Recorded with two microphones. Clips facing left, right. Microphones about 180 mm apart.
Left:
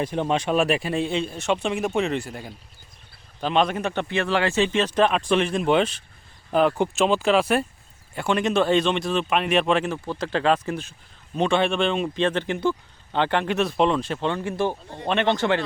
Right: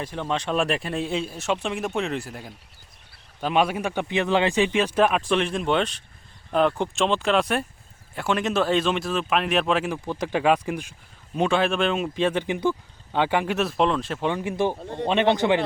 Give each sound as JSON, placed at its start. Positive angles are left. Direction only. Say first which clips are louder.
{"t": 0.0, "sound": "speech", "louder": "left 4 dB", "side_deg": 20}
{"t": 14.3, "sound": "speech", "louder": "right 1 dB", "side_deg": -15}